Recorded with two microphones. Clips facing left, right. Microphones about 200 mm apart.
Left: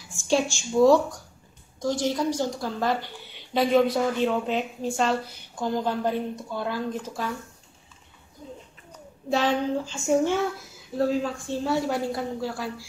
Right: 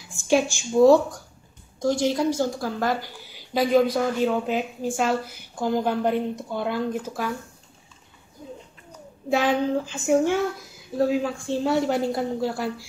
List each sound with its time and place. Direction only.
0.3 s a woman's voice: 20° right (ahead or behind)
9.3 s a woman's voice: 15° right (ahead or behind)